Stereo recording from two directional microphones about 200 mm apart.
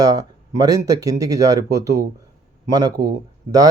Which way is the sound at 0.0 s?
20° right (ahead or behind).